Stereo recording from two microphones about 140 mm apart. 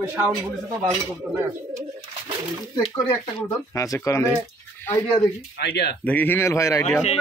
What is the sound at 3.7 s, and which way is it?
Speech, 20° left (ahead or behind).